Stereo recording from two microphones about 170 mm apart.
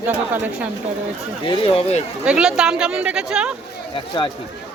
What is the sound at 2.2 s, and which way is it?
Speech, 5° right (ahead or behind).